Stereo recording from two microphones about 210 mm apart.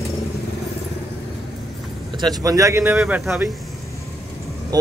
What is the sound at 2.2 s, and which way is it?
Speech, 15° right (ahead or behind).